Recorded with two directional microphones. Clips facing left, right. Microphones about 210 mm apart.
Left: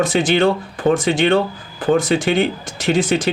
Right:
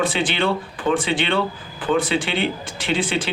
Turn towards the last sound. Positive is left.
turn(degrees=45)  # may be behind; listen again after turning